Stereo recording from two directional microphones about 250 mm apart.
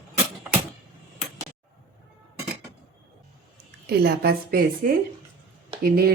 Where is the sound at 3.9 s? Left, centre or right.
Right.